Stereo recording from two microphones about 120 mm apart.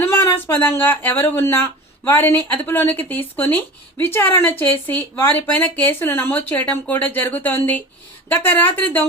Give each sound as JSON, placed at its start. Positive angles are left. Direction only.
{"t": 0.0, "sound": "speech", "side_deg": 20}